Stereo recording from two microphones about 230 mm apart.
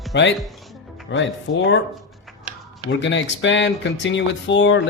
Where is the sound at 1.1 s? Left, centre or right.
Left.